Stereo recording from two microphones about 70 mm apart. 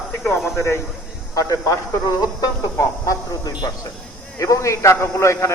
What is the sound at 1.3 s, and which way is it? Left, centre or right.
A man's voice, left.